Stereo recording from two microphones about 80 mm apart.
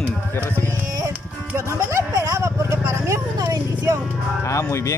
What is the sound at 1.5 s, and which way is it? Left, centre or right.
Vehicle, right.